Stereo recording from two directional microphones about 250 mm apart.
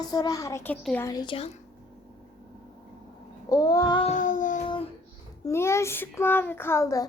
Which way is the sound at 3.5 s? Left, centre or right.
Centre.